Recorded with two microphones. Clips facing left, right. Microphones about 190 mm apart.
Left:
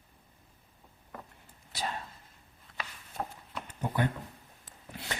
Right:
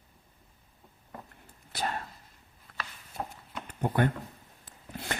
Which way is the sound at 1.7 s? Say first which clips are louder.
Right 3 dB; 55° right (ahead or behind).